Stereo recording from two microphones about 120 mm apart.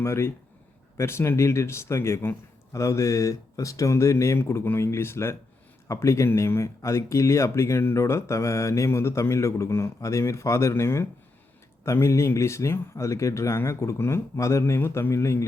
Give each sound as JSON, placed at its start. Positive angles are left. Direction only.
{"t": 0.0, "sound": "speech", "side_deg": 20}